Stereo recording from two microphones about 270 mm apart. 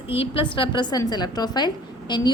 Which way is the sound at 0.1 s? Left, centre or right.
Left.